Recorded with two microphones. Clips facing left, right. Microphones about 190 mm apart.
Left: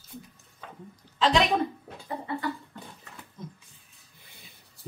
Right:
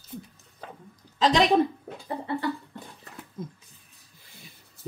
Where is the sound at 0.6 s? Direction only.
35° right (ahead or behind).